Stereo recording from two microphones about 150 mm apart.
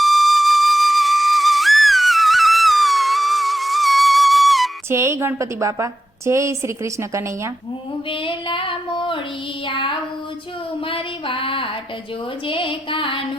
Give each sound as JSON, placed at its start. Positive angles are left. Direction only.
{"t": 0.0, "sound": "flute", "side_deg": 0}
{"t": 4.9, "sound": "a woman's voice", "side_deg": -20}
{"t": 8.1, "sound": "female singing", "side_deg": 35}
{"t": 10.8, "sound": "music", "side_deg": 35}
{"t": 12.5, "sound": "female singing", "side_deg": 35}